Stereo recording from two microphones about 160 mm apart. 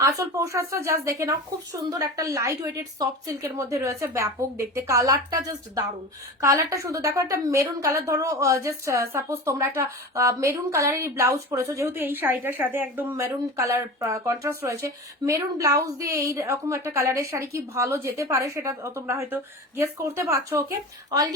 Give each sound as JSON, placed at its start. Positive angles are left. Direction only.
{"t": 0.0, "sound": "a woman's voice", "side_deg": -20}